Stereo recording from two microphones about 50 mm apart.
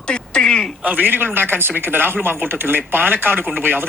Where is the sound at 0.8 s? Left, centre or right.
Right.